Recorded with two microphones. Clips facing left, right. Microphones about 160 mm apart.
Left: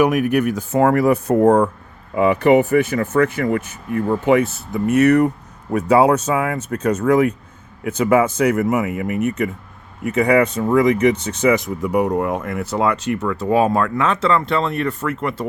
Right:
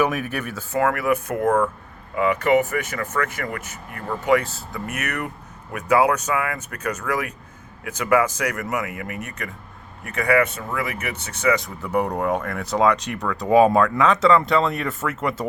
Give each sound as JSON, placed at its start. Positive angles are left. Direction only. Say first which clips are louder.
{"t": 0.0, "sound": "speech", "louder": "left 7 dB", "side_deg": 15}
{"t": 0.8, "sound": "speech", "louder": "left 6 dB", "side_deg": 35}
{"t": 11.8, "sound": "speech", "louder": "left 5 dB", "side_deg": 10}